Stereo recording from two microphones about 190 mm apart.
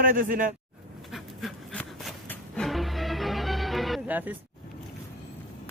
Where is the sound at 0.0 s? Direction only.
45° right (ahead or behind).